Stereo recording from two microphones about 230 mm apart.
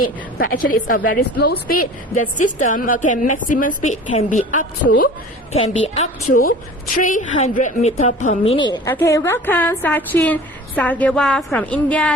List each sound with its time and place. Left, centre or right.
0.3 s a woman's voice: left
8.5 s a woman's voice: centre